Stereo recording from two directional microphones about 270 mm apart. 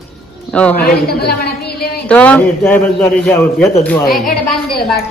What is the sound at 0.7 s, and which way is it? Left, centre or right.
A woman's voice, left.